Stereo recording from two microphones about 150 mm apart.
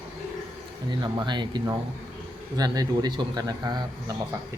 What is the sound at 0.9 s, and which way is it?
A man's voice, 30° right (ahead or behind).